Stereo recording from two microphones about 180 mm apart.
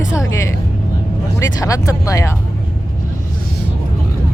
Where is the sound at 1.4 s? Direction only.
15° left (ahead or behind).